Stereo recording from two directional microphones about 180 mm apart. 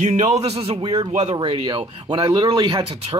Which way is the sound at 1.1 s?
35° right (ahead or behind).